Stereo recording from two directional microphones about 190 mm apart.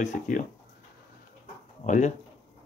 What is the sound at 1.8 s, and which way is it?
Speech, 40° left (ahead or behind).